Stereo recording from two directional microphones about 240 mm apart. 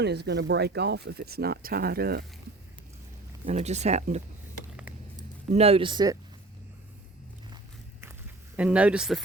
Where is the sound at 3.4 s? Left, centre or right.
Right.